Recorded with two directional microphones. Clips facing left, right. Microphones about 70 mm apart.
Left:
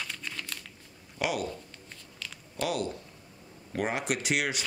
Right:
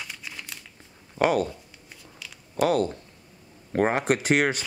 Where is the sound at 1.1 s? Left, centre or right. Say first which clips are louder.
Right 9 dB; right.